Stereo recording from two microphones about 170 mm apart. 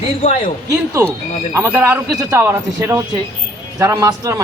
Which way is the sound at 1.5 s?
15° right (ahead or behind).